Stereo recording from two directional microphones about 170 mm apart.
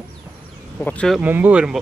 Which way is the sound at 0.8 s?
5° left (ahead or behind).